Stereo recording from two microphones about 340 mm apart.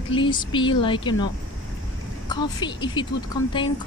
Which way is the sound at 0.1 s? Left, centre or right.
Centre.